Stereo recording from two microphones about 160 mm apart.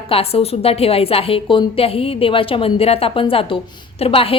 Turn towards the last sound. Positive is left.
turn(degrees=35)  # may be behind; listen again after turning